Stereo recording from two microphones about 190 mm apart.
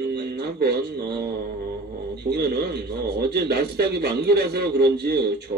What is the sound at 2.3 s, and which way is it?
A man's voice, 60° right (ahead or behind).